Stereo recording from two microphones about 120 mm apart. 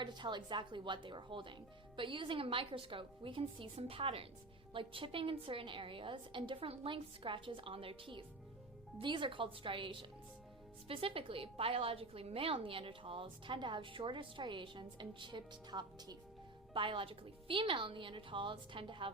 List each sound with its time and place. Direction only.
0.0 s a woman's voice: 40° right (ahead or behind)